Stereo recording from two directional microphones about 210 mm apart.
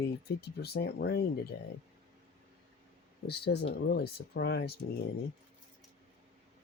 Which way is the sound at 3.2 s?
50° left (ahead or behind).